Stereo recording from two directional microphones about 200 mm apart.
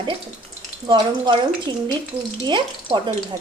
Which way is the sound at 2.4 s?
25° right (ahead or behind).